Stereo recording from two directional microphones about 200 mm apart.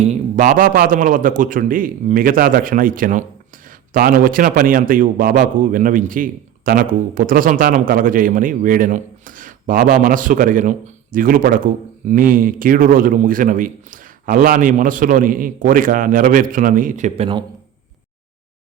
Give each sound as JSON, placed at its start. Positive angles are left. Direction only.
{"t": 0.0, "sound": "a man's voice", "side_deg": -35}